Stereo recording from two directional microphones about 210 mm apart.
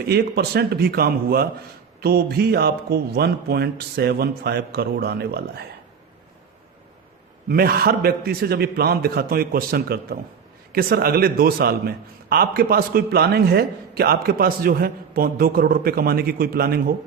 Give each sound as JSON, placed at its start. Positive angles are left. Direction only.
{"t": 0.1, "sound": "a man's voice", "side_deg": -50}
{"t": 7.4, "sound": "a man's voice", "side_deg": -45}